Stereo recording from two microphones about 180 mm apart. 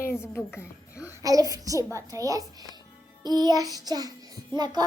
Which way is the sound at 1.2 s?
20° right (ahead or behind).